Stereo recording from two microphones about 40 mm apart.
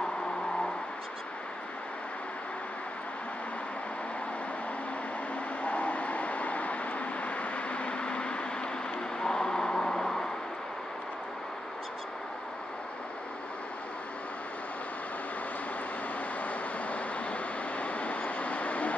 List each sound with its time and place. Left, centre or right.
5.6 s vehicle: left; by 10.2 s centre
16.3 s vehicle: left